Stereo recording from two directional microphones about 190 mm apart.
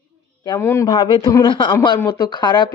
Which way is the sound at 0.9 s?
25° left (ahead or behind).